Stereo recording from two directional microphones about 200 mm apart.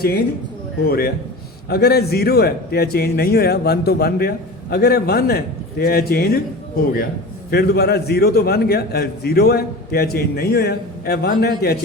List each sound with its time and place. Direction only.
0.9 s a man's voice: 50° left (ahead or behind)
7.5 s a man's voice: 50° left (ahead or behind)